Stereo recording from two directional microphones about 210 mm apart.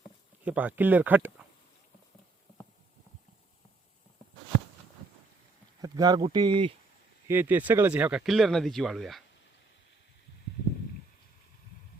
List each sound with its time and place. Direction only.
0.4 s speech: 5° right (ahead or behind)
5.8 s speech: 20° right (ahead or behind)
7.3 s speech: 10° right (ahead or behind)